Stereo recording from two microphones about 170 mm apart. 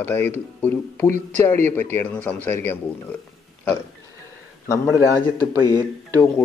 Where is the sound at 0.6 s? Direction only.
10° left (ahead or behind).